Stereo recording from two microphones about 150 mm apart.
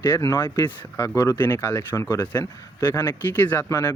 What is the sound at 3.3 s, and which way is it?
Speech, 15° left (ahead or behind).